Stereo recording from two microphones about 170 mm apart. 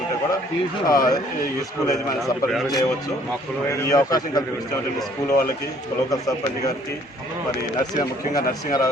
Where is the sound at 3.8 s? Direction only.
20° left (ahead or behind).